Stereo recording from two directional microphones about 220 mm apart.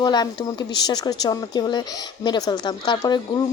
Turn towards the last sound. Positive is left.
turn(degrees=20)  # may be behind; listen again after turning